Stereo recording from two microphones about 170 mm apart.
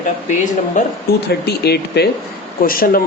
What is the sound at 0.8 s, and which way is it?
Speech, 50° left (ahead or behind).